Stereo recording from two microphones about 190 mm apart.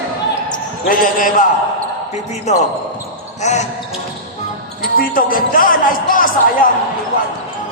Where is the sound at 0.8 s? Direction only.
45° left (ahead or behind).